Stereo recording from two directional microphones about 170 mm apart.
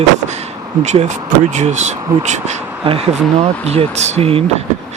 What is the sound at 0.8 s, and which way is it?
Speech, 40° right (ahead or behind).